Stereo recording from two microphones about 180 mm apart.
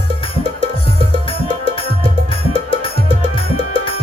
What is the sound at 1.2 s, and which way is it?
Music, 30° left (ahead or behind).